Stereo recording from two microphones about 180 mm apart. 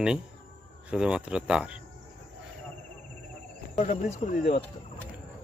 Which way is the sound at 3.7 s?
40° left (ahead or behind).